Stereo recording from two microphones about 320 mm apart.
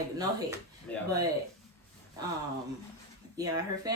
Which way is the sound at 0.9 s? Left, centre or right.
Centre.